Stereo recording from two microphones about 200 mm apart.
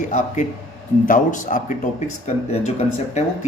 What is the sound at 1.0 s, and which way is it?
Speech, 40° left (ahead or behind).